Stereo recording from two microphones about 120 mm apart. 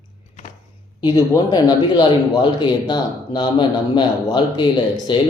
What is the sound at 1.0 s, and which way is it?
Speech, 35° left (ahead or behind).